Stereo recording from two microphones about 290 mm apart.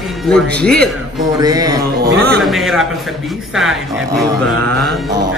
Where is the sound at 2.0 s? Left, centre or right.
Right.